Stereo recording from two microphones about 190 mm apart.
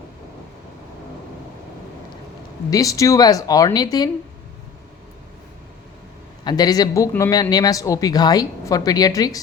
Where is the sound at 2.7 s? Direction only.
15° left (ahead or behind).